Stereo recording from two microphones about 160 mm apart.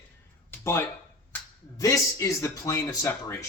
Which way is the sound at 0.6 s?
15° left (ahead or behind).